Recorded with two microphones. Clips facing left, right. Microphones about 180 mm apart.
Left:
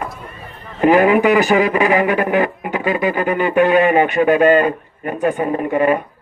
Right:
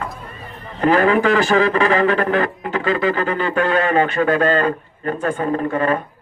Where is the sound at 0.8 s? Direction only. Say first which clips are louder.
Left 3 dB; 15° left (ahead or behind).